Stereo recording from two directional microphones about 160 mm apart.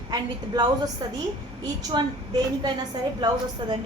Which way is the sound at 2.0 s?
30° right (ahead or behind).